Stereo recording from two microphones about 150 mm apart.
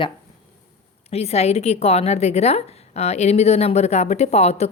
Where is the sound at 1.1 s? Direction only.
45° left (ahead or behind).